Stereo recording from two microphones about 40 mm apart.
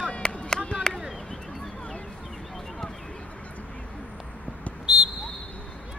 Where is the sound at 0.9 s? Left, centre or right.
Centre.